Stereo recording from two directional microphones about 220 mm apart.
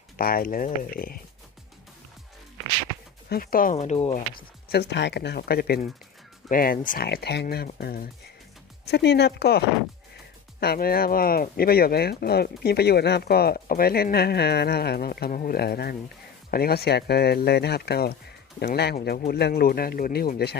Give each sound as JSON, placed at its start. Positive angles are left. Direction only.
{"t": 0.2, "sound": "speech", "side_deg": 40}
{"t": 3.2, "sound": "speech", "side_deg": 40}
{"t": 4.7, "sound": "speech", "side_deg": 50}
{"t": 10.6, "sound": "speech", "side_deg": 45}